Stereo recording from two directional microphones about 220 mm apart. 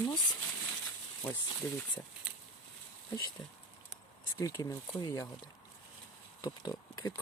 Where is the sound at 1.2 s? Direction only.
10° left (ahead or behind).